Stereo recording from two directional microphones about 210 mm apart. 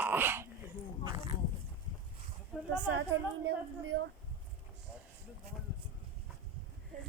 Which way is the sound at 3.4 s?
65° right (ahead or behind).